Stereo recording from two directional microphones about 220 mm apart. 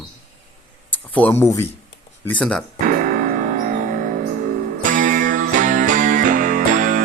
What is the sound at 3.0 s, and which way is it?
Music, 35° right (ahead or behind).